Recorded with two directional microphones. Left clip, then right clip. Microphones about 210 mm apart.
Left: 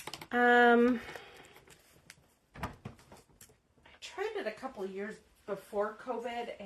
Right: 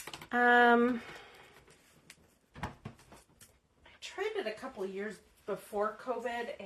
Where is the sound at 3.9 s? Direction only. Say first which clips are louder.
Even; 25° left (ahead or behind).